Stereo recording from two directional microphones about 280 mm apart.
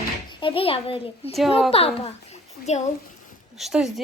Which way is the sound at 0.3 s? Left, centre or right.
Centre.